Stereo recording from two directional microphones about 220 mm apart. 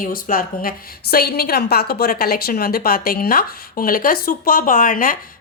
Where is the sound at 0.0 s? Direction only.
40° left (ahead or behind).